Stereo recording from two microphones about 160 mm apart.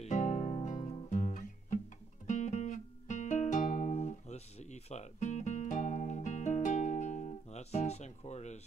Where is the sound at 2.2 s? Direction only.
50° left (ahead or behind).